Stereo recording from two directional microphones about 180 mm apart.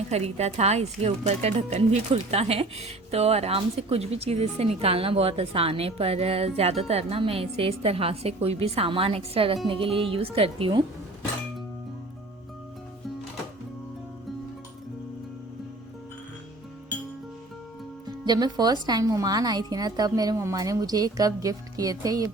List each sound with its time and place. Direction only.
0.1 s speech: 35° right (ahead or behind)
18.0 s speech: 25° right (ahead or behind)